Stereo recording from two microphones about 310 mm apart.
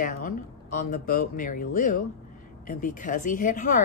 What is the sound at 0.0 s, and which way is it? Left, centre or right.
A woman's voice, left.